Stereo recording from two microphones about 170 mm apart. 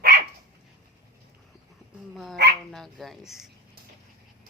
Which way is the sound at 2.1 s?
Centre (ahead or behind).